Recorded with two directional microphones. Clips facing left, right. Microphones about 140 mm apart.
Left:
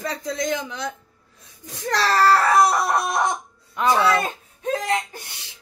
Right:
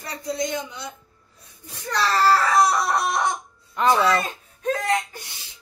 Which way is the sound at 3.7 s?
5° left (ahead or behind).